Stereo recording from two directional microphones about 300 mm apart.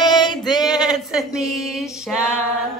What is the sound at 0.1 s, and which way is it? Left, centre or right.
Male singing, centre.